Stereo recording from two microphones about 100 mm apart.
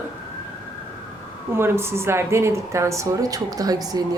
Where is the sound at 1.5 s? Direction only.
25° right (ahead or behind); by 4.0 s 40° right (ahead or behind).